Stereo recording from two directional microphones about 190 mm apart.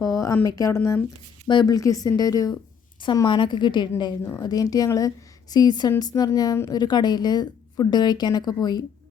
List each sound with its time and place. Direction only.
0.0 s a woman's voice: 15° left (ahead or behind)
4.2 s a woman's voice: 10° left (ahead or behind)